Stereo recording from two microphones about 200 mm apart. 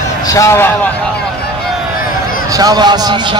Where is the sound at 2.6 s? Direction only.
20° right (ahead or behind).